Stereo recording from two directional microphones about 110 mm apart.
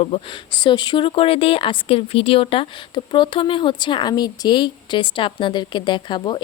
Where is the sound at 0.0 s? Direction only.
55° left (ahead or behind).